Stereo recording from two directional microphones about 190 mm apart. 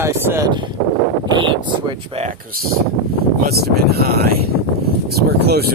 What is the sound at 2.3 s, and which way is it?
Speech, 50° right (ahead or behind).